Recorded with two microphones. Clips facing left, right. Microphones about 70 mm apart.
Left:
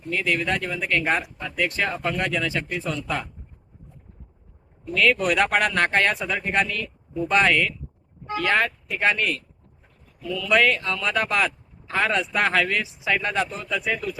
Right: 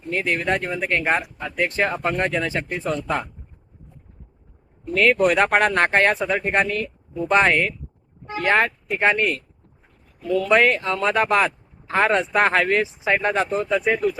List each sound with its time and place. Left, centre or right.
0.1 s speech: right
4.9 s speech: right
10.2 s speech: right
10.5 s speech: right